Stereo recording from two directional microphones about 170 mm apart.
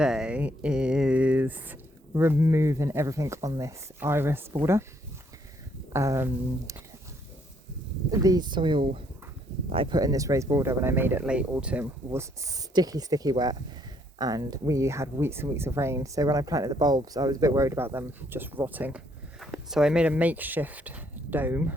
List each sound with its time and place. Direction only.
0.0 s speech: 5° right (ahead or behind)
5.9 s speech: 15° right (ahead or behind)
8.1 s speech: 20° right (ahead or behind)